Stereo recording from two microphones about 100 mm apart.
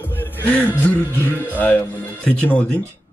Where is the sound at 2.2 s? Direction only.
15° left (ahead or behind).